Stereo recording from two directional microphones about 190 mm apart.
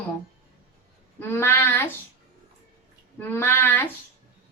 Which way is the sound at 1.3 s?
15° left (ahead or behind).